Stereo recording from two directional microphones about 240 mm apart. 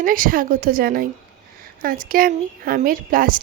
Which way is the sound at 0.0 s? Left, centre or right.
Right.